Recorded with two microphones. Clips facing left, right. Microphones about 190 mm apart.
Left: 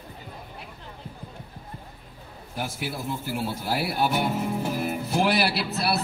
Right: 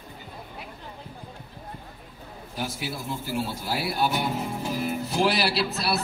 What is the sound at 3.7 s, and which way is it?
Music, 50° left (ahead or behind).